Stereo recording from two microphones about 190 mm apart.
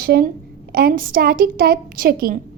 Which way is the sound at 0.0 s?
55° right (ahead or behind).